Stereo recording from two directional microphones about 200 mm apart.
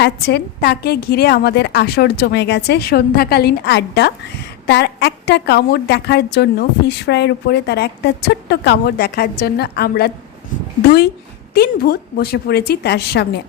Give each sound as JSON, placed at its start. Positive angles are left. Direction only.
{"t": 0.0, "sound": "a woman's voice", "side_deg": 55}
{"t": 11.5, "sound": "a woman's voice", "side_deg": 50}